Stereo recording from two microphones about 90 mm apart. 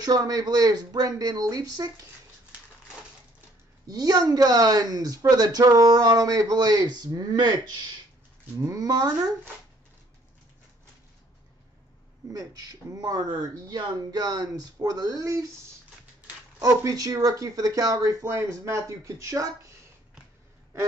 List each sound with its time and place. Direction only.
0.0 s speech: 45° right (ahead or behind)
3.8 s speech: 45° right (ahead or behind)
8.5 s speech: 40° right (ahead or behind)
12.3 s speech: 45° right (ahead or behind)
16.6 s speech: 40° right (ahead or behind)